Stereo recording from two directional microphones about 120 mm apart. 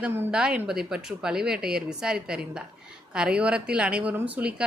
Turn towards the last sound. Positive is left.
turn(degrees=-10)  # may be behind; listen again after turning